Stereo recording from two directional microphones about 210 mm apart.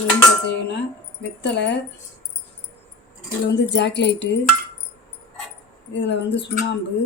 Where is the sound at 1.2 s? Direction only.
55° left (ahead or behind).